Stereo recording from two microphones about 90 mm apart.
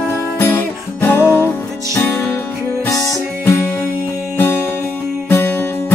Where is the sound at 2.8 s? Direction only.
40° left (ahead or behind).